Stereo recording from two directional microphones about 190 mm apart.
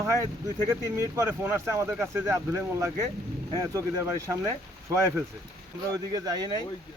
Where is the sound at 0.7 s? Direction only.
15° right (ahead or behind).